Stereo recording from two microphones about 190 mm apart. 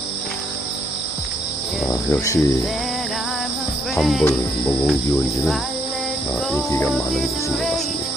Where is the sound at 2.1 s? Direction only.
15° left (ahead or behind).